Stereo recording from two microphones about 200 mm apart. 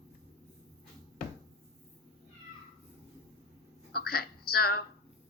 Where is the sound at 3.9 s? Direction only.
50° left (ahead or behind).